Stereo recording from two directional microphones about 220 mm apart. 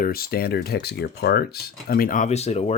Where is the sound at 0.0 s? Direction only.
45° left (ahead or behind).